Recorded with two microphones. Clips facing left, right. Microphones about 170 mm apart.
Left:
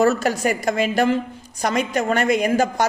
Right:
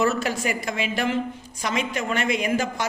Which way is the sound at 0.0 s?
40° left (ahead or behind).